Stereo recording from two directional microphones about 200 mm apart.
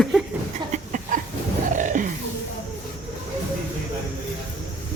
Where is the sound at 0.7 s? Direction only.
40° right (ahead or behind).